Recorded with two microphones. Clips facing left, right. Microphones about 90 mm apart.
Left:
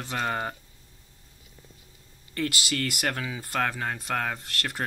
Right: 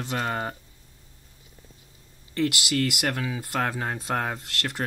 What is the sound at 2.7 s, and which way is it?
Speech, 10° right (ahead or behind).